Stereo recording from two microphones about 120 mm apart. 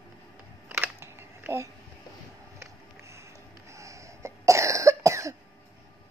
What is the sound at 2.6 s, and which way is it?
Music, 25° right (ahead or behind).